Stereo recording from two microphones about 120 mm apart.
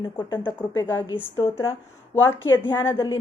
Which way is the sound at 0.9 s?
40° left (ahead or behind).